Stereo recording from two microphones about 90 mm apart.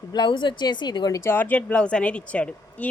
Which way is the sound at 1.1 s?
25° left (ahead or behind).